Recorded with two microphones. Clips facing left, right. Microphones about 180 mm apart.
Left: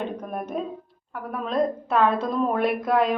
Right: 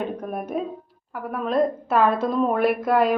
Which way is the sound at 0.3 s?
10° right (ahead or behind).